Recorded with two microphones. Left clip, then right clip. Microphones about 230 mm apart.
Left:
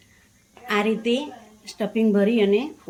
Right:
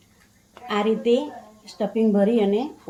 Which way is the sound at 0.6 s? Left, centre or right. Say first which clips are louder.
Right 1 dB; left.